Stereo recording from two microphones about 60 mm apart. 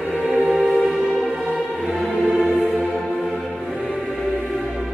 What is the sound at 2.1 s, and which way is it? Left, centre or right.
Music, centre.